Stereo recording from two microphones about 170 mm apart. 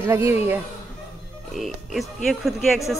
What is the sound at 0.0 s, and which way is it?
Speech, 15° right (ahead or behind).